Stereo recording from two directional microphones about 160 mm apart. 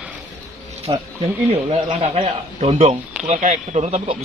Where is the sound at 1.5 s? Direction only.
40° right (ahead or behind).